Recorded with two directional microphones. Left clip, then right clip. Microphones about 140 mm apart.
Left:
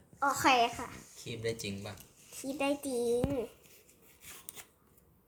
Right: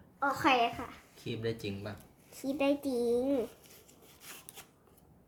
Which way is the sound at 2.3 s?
Centre (ahead or behind).